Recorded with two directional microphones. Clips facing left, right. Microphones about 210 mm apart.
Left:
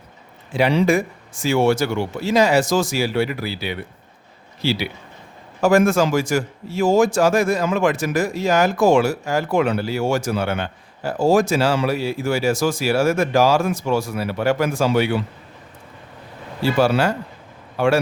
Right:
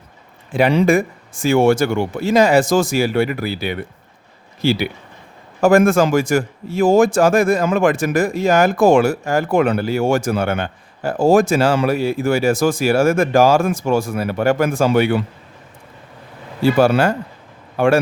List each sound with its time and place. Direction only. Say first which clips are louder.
0.5 s a man's voice: right 3 dB; 50° right (ahead or behind)
16.7 s a man's voice: right 2 dB; 50° right (ahead or behind)